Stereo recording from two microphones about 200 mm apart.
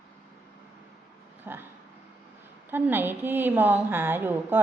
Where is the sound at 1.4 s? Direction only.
10° right (ahead or behind).